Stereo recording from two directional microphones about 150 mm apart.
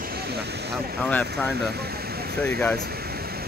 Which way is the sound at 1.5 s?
90° right.